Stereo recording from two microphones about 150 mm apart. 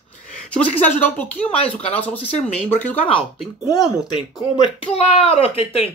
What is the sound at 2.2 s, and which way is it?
Speech, 45° left (ahead or behind).